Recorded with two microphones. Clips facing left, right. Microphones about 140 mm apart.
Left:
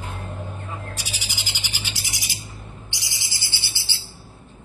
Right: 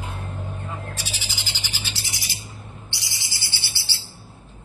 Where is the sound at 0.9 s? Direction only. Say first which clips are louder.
Even; 15° left (ahead or behind).